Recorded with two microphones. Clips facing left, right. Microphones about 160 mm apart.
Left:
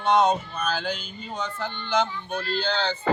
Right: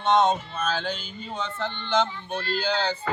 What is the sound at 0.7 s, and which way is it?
Speech, centre (ahead or behind).